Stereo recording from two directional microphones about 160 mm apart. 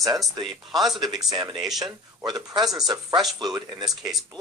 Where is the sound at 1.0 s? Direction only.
25° right (ahead or behind).